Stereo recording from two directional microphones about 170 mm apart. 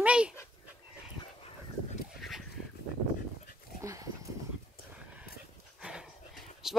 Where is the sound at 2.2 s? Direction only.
Centre (ahead or behind).